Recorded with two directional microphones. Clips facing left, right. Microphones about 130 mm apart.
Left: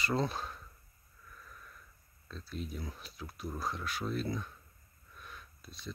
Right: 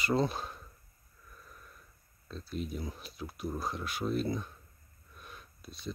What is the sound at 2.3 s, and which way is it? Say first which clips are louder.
Speech: right 4 dB; 20° right (ahead or behind).